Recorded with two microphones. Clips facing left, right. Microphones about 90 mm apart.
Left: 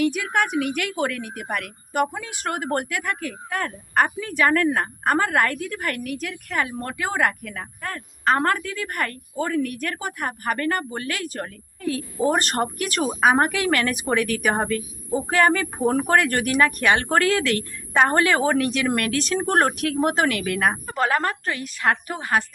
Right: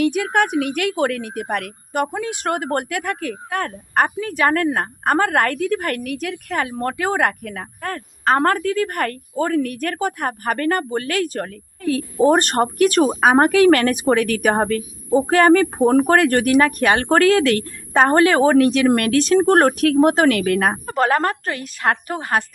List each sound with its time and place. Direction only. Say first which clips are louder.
0.0 s a woman's voice: right 4 dB; 50° right (ahead or behind)